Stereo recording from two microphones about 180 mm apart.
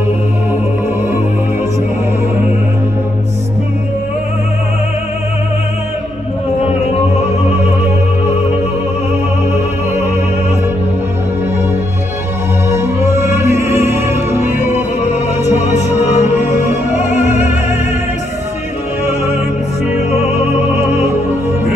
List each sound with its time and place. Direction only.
12.6 s music: 15° right (ahead or behind)
14.4 s music: 40° left (ahead or behind)
17.2 s opera: 40° left (ahead or behind)
19.9 s music: 40° left (ahead or behind)